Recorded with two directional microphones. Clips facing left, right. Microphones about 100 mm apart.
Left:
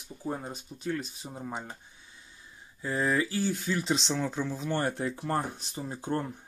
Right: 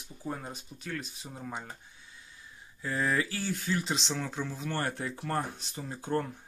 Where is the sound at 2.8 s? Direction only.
20° left (ahead or behind).